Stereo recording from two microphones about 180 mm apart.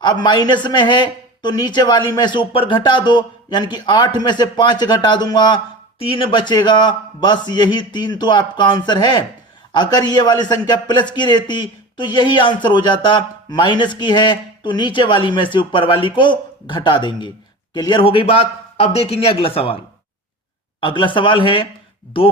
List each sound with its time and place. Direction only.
0.0 s a man's voice: 25° left (ahead or behind)
20.8 s a man's voice: 25° left (ahead or behind)